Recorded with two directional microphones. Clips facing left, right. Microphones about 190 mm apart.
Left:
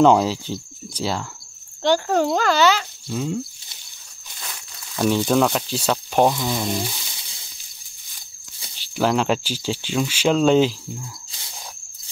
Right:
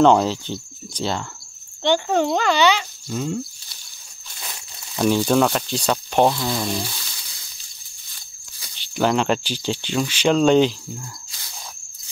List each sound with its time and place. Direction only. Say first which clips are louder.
0.0 s speech: even; 5° left (ahead or behind)
4.9 s speech: right 1 dB; centre (ahead or behind)
6.8 s sizzle: left 2 dB; 20° left (ahead or behind)
8.9 s speech: even; 5° left (ahead or behind)